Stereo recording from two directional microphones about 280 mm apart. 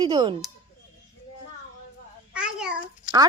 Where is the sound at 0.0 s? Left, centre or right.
Centre.